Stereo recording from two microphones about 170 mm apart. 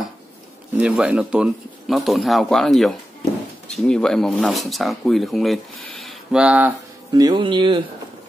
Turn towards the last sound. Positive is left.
turn(degrees=-30)  # may be behind; listen again after turning